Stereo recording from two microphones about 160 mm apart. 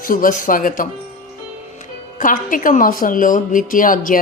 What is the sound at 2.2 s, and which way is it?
A woman's voice, 55° left (ahead or behind).